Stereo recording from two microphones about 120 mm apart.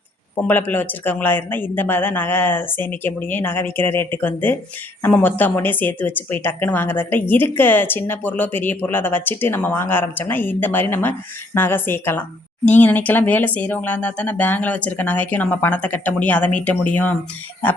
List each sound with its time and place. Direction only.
0.4 s a woman's voice: 15° left (ahead or behind)